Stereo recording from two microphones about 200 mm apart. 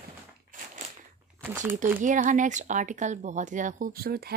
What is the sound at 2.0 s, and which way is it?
Speech, 40° right (ahead or behind).